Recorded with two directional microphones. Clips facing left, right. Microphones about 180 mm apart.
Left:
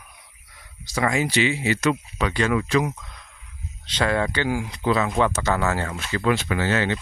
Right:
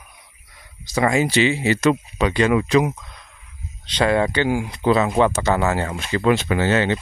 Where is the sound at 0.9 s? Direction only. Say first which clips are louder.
Right 4 dB; 25° right (ahead or behind).